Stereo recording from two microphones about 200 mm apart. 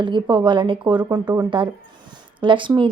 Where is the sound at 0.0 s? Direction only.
25° right (ahead or behind).